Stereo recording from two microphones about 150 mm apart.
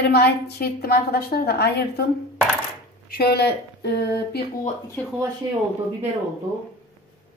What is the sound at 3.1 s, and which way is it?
A woman's voice, 90° left.